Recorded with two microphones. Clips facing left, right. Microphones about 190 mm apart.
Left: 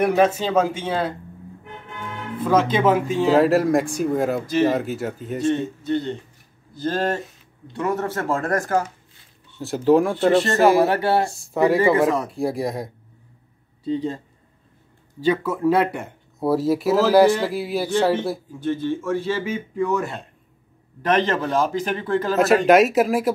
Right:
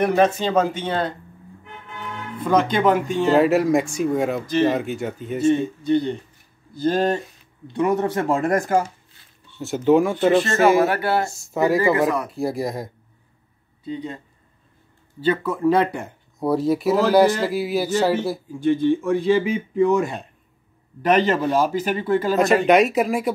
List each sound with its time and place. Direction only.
0.0 s speech: 5° left (ahead or behind)
2.3 s speech: 5° left (ahead or behind)
5.5 s speech: 15° right (ahead or behind)
9.6 s speech: centre (ahead or behind)
10.9 s speech: 30° left (ahead or behind)
11.5 s speech: centre (ahead or behind)
13.8 s speech: 30° left (ahead or behind)
15.1 s speech: 10° left (ahead or behind); by 22.4 s 10° right (ahead or behind)
22.4 s speech: centre (ahead or behind)